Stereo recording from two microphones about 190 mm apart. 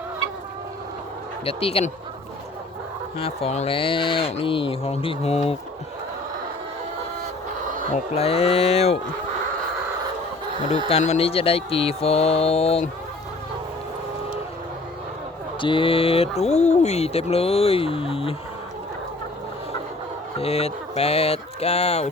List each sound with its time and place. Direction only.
1.5 s speech: 30° left (ahead or behind)
3.2 s speech: 30° left (ahead or behind)
8.1 s speech: 30° left (ahead or behind)
10.8 s speech: 35° left (ahead or behind)
15.6 s speech: 25° left (ahead or behind)
20.4 s speech: 30° left (ahead or behind)